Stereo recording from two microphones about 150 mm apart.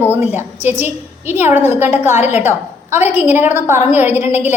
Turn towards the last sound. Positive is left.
turn(degrees=-15)  # may be behind; listen again after turning